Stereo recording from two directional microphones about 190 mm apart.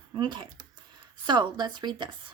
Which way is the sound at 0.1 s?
25° right (ahead or behind).